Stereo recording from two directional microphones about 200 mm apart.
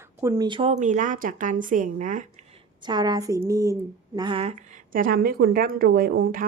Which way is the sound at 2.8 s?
20° right (ahead or behind).